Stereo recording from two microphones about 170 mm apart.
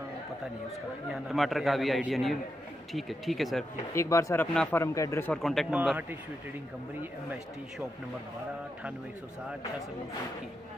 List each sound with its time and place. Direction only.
1.1 s a man's voice: centre (ahead or behind)
3.9 s speech: 15° left (ahead or behind)
5.3 s a man's voice: centre (ahead or behind)